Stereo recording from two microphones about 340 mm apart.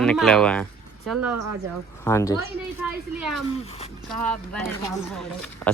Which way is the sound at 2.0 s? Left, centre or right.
Centre.